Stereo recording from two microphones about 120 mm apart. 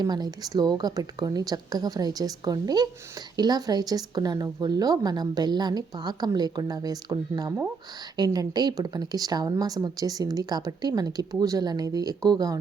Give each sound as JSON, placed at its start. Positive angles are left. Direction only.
{"t": 0.0, "sound": "speech", "side_deg": -35}